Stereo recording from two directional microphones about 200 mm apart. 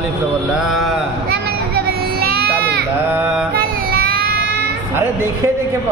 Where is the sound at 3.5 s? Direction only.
45° right (ahead or behind).